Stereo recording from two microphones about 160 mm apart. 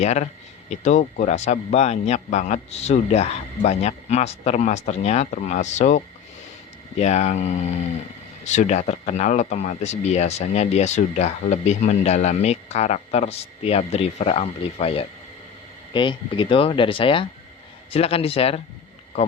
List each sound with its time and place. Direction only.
0.0 s speech: 45° left (ahead or behind)